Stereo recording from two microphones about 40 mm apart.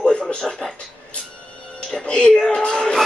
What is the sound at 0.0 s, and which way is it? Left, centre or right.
Television, left.